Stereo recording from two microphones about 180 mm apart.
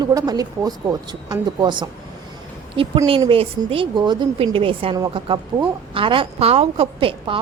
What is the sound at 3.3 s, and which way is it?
A woman's voice, 30° right (ahead or behind).